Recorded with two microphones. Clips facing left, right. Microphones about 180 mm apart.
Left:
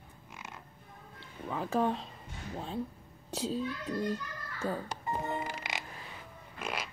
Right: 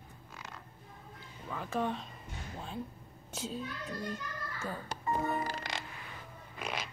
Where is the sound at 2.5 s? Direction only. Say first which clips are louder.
Left 5 dB; 35° left (ahead or behind).